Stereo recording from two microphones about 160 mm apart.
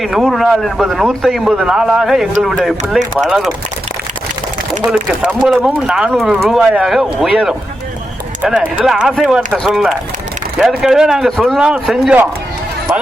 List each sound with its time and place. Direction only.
0.0 s speech: centre (ahead or behind)
4.9 s speech: 5° right (ahead or behind)